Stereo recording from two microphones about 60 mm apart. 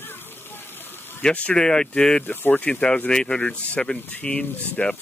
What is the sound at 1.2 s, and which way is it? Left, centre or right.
Speech, centre.